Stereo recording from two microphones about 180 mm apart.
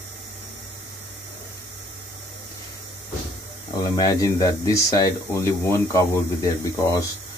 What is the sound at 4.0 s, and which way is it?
Speech, 20° left (ahead or behind).